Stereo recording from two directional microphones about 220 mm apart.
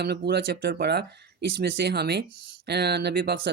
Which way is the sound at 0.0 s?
45° right (ahead or behind).